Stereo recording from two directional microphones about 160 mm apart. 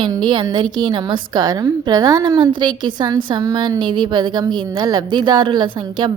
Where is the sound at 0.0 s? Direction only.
30° right (ahead or behind).